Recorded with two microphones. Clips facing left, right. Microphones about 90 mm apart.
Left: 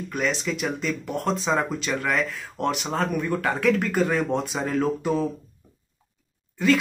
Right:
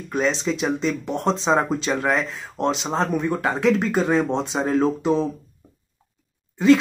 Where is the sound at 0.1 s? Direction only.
30° right (ahead or behind).